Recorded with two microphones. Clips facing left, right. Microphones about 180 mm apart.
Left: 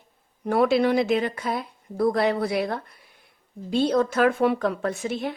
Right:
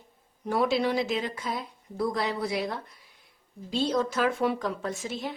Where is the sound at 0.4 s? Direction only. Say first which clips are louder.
Left 5 dB; 60° left (ahead or behind).